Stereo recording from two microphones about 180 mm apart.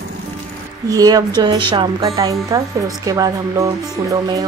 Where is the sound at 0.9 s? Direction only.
20° right (ahead or behind).